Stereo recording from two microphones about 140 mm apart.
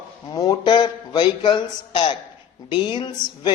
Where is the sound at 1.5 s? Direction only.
35° left (ahead or behind).